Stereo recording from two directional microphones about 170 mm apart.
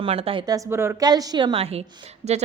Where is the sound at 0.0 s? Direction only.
35° right (ahead or behind).